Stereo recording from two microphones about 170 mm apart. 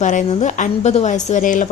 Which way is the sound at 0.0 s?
45° left (ahead or behind).